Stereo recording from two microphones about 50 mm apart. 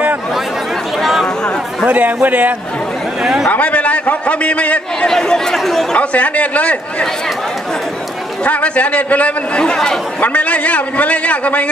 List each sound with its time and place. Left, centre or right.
1.9 s a man's voice: right
3.4 s a man's voice: left
5.0 s speech: centre
5.9 s a man's voice: left
8.5 s a man's voice: left
9.7 s speech: centre
10.2 s a man's voice: left